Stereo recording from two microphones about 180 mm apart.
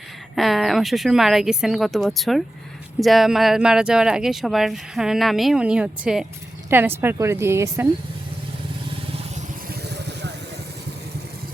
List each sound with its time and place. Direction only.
0.3 s a woman's voice: centre (ahead or behind)
9.6 s vehicle: 70° right (ahead or behind)